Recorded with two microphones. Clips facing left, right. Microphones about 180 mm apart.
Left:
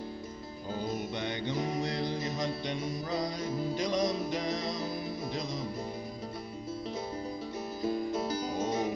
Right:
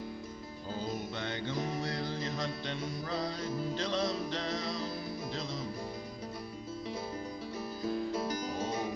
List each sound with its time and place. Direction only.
0.7 s music: 15° left (ahead or behind)
8.1 s music: 20° left (ahead or behind)